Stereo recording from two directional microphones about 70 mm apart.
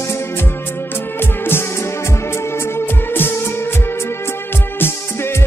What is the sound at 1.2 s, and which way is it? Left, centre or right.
Music, left.